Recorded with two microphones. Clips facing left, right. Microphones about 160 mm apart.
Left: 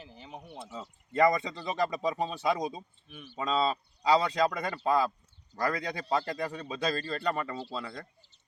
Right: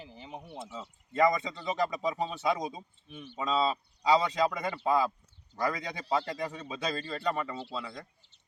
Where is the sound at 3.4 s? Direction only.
10° right (ahead or behind).